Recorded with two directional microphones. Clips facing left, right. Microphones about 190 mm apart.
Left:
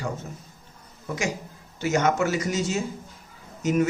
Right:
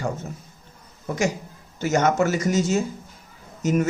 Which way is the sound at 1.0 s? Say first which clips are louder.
Right 4 dB; 45° right (ahead or behind).